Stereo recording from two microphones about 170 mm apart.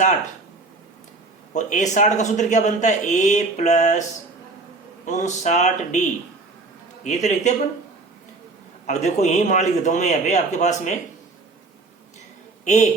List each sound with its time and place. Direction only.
1.5 s a man's voice: 45° left (ahead or behind)
5.0 s a man's voice: 45° left (ahead or behind)
8.9 s a man's voice: 40° left (ahead or behind)
12.6 s a woman's voice: 45° left (ahead or behind)